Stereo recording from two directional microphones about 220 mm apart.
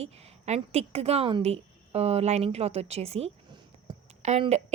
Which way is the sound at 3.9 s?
25° right (ahead or behind).